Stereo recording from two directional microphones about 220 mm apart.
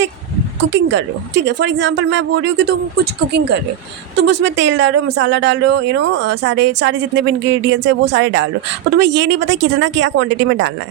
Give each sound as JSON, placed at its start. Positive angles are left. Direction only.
{"t": 0.7, "sound": "speech", "side_deg": -55}